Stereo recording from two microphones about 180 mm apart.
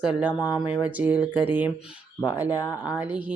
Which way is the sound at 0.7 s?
10° right (ahead or behind).